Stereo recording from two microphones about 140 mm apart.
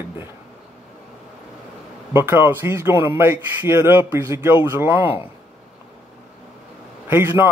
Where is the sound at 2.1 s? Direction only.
15° right (ahead or behind).